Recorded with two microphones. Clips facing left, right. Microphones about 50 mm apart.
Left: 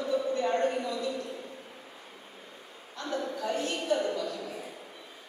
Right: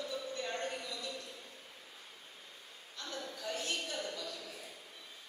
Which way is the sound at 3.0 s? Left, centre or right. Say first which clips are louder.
Left 10 dB; centre.